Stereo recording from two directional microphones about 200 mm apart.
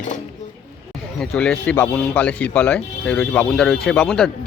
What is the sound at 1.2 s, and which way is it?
Speech, 5° left (ahead or behind).